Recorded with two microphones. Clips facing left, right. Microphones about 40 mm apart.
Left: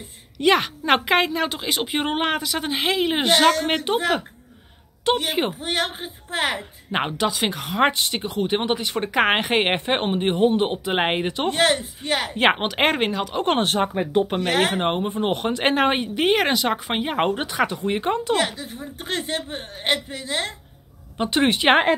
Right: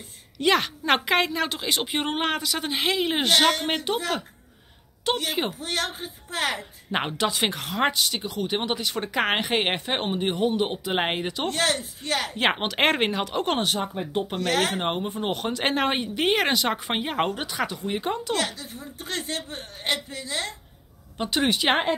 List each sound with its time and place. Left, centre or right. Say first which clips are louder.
0.4 s a woman's voice: left 3 dB; centre
3.6 s speech: left 5 dB; left
6.9 s speech: left 3 dB; centre
7.9 s speech: left 2 dB; left; by 12.8 s centre
12.8 s speech: left 1 dB; centre
13.4 s a woman's voice: left 6 dB; left; by 17.2 s centre
17.3 s speech: left 6 dB; left
21.2 s speech: left 4 dB; left